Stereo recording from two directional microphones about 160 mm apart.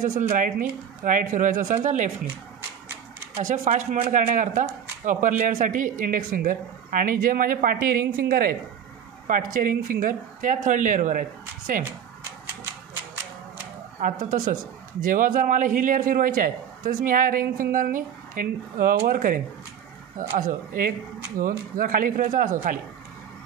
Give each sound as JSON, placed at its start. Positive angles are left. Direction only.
{"t": 0.0, "sound": "speech", "side_deg": -50}
{"t": 3.3, "sound": "a man's voice", "side_deg": -50}
{"t": 13.9, "sound": "a man's voice", "side_deg": -60}